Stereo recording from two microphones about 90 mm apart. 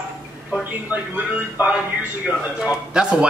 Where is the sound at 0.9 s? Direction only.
15° right (ahead or behind).